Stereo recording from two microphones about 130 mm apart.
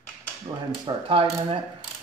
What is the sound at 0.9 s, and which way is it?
Speech, 40° right (ahead or behind).